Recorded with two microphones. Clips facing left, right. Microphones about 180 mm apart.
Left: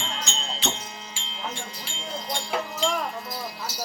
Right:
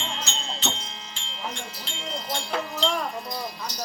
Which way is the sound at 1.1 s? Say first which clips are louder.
Right 2 dB; centre (ahead or behind).